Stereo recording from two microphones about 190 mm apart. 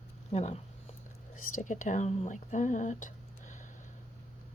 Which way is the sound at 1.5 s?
45° left (ahead or behind).